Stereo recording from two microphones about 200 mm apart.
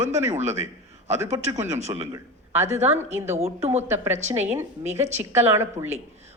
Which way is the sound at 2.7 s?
35° right (ahead or behind).